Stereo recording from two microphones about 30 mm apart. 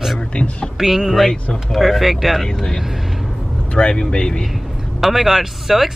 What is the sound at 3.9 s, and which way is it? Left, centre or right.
Speech, left.